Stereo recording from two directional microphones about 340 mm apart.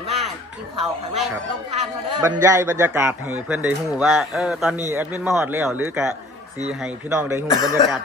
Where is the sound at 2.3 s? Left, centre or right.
Centre.